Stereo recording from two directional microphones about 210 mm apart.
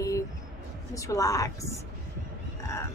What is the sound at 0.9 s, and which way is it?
Speech, 15° left (ahead or behind).